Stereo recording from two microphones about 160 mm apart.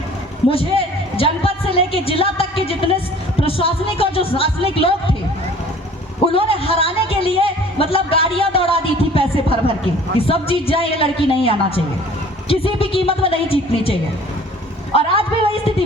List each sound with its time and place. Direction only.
0.5 s a sound: 35° left (ahead or behind)
3.4 s speech: 35° left (ahead or behind)
6.3 s speech: 35° left (ahead or behind)